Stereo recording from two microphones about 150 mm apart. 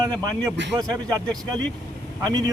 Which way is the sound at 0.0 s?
30° right (ahead or behind).